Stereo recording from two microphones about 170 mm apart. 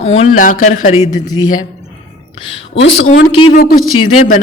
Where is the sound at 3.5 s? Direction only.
60° left (ahead or behind).